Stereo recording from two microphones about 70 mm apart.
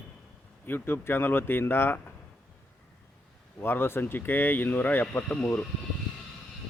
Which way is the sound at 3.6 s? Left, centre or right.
Left.